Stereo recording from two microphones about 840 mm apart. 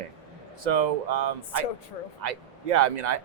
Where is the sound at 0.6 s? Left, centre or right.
Right.